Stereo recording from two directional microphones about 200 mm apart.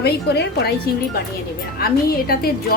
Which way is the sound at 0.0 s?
55° left (ahead or behind).